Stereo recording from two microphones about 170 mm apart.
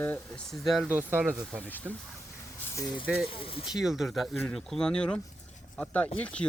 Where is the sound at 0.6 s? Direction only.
Centre (ahead or behind).